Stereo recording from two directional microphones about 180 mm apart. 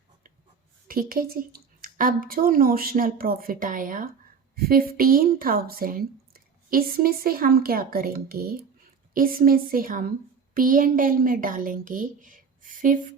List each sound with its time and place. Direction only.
0.9 s a woman's voice: 55° right (ahead or behind)